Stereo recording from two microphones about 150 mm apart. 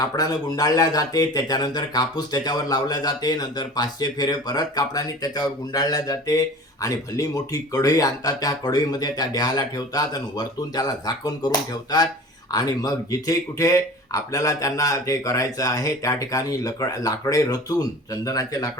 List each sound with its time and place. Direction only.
0.0 s speech: 25° left (ahead or behind)